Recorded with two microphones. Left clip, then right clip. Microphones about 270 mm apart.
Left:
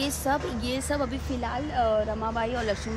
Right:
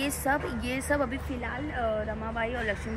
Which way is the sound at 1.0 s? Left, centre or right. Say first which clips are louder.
Left 1 dB; centre.